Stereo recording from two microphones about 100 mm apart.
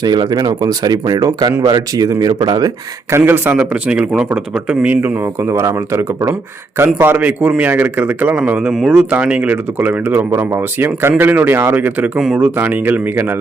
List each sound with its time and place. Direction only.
0.0 s speech: 45° right (ahead or behind)
3.2 s a man's voice: 20° right (ahead or behind)
5.5 s a man's voice: 30° right (ahead or behind)
10.2 s speech: 25° right (ahead or behind)